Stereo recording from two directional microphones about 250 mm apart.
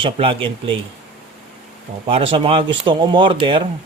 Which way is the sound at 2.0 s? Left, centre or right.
Right.